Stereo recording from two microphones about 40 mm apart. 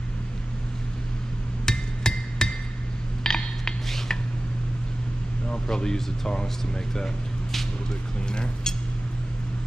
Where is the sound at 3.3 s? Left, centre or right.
Centre.